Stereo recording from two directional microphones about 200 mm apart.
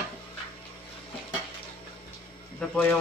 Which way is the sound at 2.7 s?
10° left (ahead or behind).